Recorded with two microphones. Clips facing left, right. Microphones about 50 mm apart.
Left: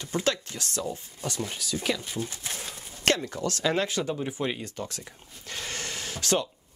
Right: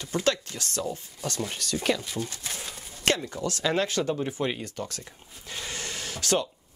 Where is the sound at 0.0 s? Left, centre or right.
Left.